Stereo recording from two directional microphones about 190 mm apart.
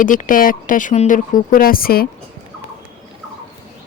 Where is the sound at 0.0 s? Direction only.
45° left (ahead or behind).